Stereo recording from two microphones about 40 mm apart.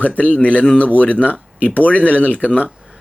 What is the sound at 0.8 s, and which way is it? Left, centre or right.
Speech, left.